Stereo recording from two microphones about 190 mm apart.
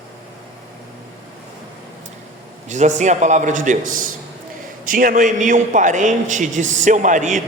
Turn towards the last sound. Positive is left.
turn(degrees=-40)  # may be behind; listen again after turning